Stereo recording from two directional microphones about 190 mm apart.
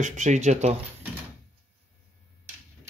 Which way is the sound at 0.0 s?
40° right (ahead or behind).